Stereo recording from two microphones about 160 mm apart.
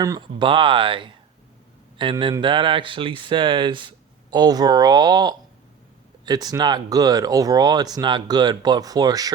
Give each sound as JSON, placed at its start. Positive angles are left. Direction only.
{"t": 0.0, "sound": "speech", "side_deg": -25}